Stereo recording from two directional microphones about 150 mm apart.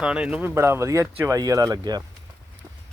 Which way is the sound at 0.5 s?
20° right (ahead or behind).